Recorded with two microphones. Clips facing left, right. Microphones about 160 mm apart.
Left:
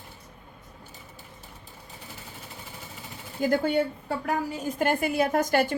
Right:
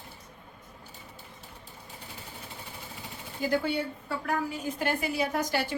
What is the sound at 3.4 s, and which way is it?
A woman's voice, 50° left (ahead or behind).